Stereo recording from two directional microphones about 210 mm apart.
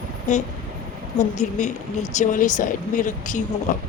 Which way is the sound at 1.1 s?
35° left (ahead or behind).